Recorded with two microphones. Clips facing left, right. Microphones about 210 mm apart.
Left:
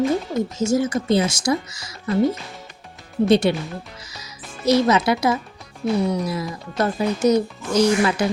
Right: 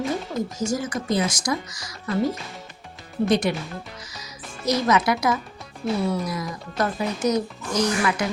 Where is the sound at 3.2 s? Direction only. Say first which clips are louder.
Left 5 dB; 30° left (ahead or behind).